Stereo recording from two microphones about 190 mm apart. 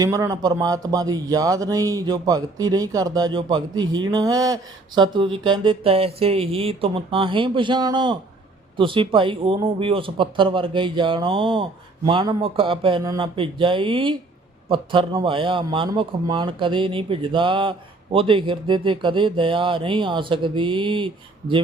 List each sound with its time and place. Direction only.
0.0 s speech: 15° right (ahead or behind)